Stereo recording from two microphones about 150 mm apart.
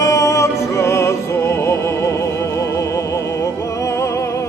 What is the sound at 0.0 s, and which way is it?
Music, 20° left (ahead or behind).